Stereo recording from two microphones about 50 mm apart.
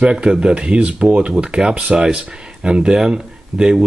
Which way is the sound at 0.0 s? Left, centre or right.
Centre.